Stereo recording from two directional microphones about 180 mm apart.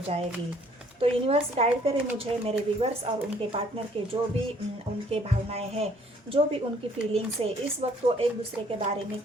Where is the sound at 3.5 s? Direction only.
30° right (ahead or behind).